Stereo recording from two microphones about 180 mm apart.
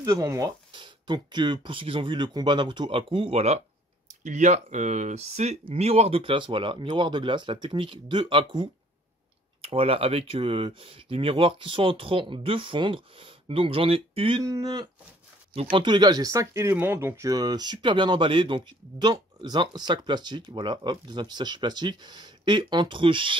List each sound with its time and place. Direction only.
0.0 s speech: 20° right (ahead or behind)
14.4 s speech: 20° right (ahead or behind)